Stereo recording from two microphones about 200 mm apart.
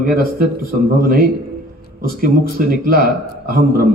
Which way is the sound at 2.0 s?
45° right (ahead or behind).